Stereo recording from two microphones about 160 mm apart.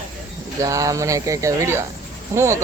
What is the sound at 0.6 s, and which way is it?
Speech, 20° right (ahead or behind).